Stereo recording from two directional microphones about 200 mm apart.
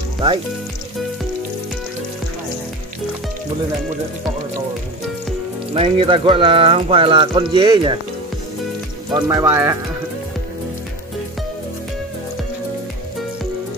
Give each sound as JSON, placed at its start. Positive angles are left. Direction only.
{"t": 5.7, "sound": "speech", "side_deg": -25}
{"t": 9.1, "sound": "speech", "side_deg": -15}